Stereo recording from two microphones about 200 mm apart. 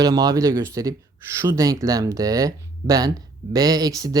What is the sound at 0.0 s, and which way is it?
Speech, 20° right (ahead or behind).